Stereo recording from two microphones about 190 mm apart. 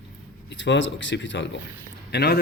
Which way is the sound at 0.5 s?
70° left (ahead or behind).